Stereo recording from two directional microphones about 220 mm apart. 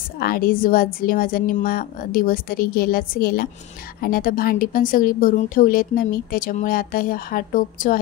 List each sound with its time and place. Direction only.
0.2 s speech: 40° left (ahead or behind)